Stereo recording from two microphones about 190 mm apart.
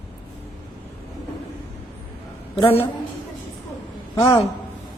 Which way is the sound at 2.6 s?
30° left (ahead or behind).